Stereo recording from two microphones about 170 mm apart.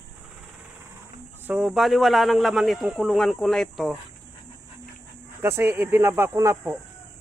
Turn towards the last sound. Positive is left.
turn(degrees=-15)  # may be behind; listen again after turning